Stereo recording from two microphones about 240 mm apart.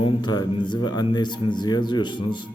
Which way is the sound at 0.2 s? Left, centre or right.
Centre.